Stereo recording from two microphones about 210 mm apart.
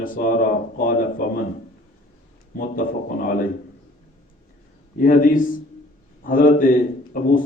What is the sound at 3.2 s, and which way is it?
Speech, 40° left (ahead or behind).